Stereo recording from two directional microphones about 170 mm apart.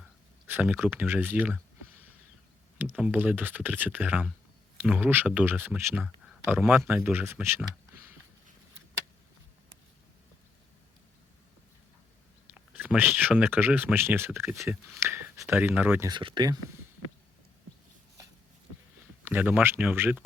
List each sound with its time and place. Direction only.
0.4 s speech: 10° right (ahead or behind)
2.7 s speech: 10° right (ahead or behind)
6.2 s a sound: 5° right (ahead or behind)
6.6 s speech: 10° right (ahead or behind)
12.5 s speech: 10° right (ahead or behind)
16.0 s speech: 25° right (ahead or behind)
19.2 s speech: 10° right (ahead or behind)